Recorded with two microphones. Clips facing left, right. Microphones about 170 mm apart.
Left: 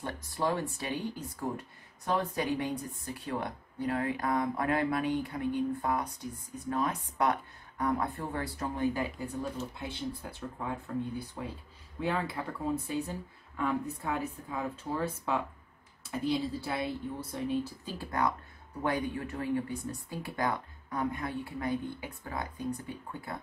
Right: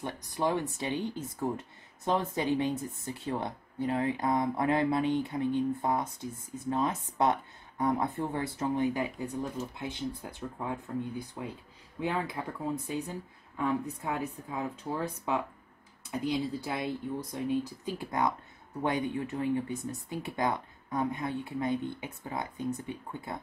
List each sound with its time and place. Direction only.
0.0 s speech: 20° right (ahead or behind)
12.0 s speech: 15° right (ahead or behind)